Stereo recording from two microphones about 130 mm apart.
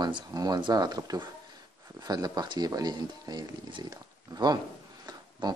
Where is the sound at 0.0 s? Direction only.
30° right (ahead or behind).